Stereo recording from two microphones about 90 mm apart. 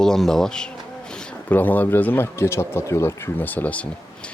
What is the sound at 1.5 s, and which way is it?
Speech, 20° left (ahead or behind).